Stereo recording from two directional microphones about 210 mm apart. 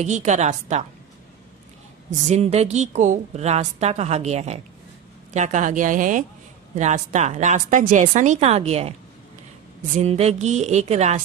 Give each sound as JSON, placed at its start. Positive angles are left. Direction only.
{"t": 0.0, "sound": "a woman's voice", "side_deg": -35}
{"t": 2.0, "sound": "a woman's voice", "side_deg": -35}